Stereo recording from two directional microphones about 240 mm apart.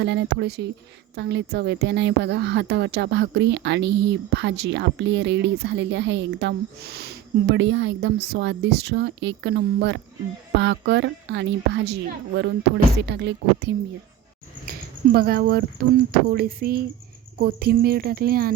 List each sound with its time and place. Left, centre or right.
0.0 s a woman's voice: right